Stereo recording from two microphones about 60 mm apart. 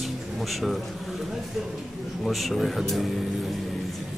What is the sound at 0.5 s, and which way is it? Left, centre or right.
Speech, centre.